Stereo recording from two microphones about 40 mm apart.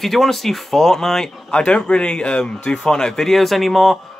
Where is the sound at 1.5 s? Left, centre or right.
Left.